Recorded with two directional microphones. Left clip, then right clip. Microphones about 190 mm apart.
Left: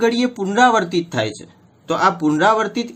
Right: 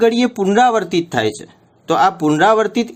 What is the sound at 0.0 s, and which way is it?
Speech, 40° right (ahead or behind).